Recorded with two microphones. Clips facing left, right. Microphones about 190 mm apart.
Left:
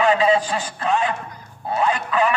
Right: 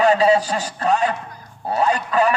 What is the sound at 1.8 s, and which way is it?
Speech, 40° right (ahead or behind).